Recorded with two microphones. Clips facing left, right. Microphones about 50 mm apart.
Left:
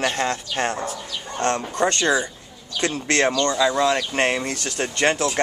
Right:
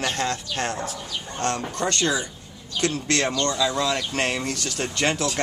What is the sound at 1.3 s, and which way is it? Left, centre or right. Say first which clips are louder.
Speech: left 5 dB; centre.